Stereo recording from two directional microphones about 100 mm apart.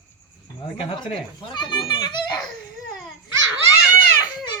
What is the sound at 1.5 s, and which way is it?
Speech, 45° left (ahead or behind).